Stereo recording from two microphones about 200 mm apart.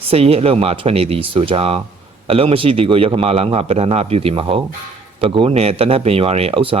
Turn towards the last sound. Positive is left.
turn(degrees=-25)  # may be behind; listen again after turning